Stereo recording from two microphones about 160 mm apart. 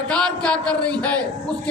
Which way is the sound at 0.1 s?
5° left (ahead or behind).